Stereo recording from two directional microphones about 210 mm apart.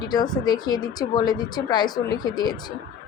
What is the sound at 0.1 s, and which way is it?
A woman's voice, 20° left (ahead or behind).